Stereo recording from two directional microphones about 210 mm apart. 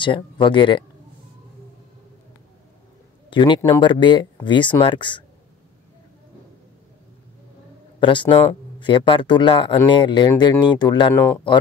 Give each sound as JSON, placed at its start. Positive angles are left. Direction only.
{"t": 0.0, "sound": "speech", "side_deg": 25}
{"t": 3.3, "sound": "speech", "side_deg": 25}
{"t": 8.0, "sound": "speech", "side_deg": 25}